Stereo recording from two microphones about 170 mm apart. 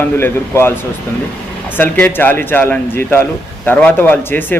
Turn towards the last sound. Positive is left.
turn(degrees=10)  # may be behind; listen again after turning